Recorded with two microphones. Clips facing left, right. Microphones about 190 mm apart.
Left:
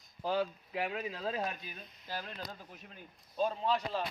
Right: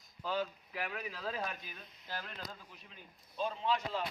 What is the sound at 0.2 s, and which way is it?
A man's voice, 35° left (ahead or behind).